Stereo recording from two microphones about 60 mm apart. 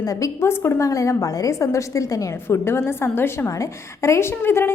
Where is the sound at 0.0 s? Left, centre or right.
Left.